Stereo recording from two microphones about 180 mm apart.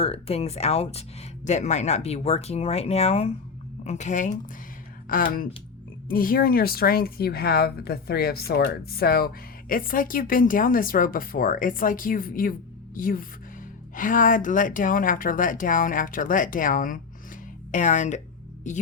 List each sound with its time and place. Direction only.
0.0 s speech: 35° left (ahead or behind)